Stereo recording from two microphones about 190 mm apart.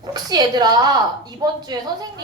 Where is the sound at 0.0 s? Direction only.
20° right (ahead or behind).